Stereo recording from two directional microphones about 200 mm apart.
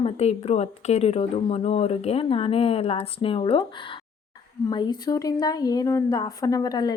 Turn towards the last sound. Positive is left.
turn(degrees=20)  # may be behind; listen again after turning